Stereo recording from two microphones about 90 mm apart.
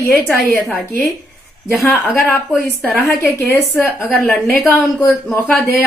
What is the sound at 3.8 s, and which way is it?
Speech, 25° left (ahead or behind).